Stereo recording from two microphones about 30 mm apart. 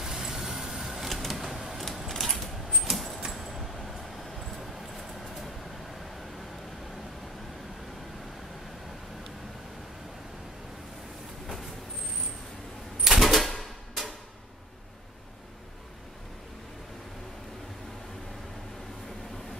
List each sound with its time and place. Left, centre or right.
0.0 s vehicle: centre
1.0 s a sound: centre
2.0 s mechanisms: centre
2.9 s a sound: centre
3.3 s vehicle: centre
13.0 s typewriter: centre